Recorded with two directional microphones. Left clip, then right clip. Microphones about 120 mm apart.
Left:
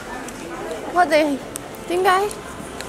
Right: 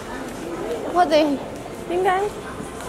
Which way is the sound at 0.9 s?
15° left (ahead or behind).